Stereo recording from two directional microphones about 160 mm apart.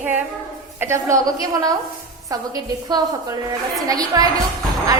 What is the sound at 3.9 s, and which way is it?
Speech, 25° right (ahead or behind).